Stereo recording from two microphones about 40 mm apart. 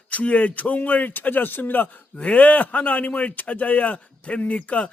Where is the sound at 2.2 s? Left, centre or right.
Left.